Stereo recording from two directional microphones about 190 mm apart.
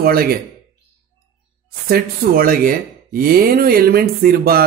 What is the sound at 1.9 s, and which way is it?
Speech, 50° right (ahead or behind).